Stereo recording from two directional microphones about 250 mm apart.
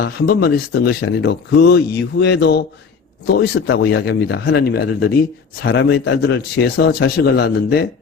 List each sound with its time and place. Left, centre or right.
0.0 s speech: left